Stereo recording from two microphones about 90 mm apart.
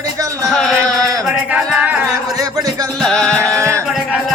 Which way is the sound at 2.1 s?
40° right (ahead or behind).